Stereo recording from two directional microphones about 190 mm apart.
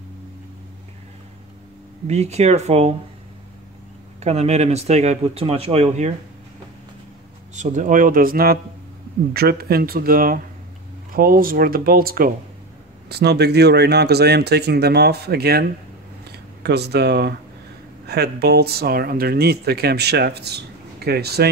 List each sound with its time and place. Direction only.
2.0 s speech: 35° right (ahead or behind)
4.2 s speech: 35° right (ahead or behind)
7.5 s speech: 40° right (ahead or behind); by 21.5 s 55° right (ahead or behind)